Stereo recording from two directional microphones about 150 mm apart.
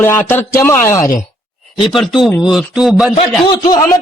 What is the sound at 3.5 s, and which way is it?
Speech, 30° left (ahead or behind).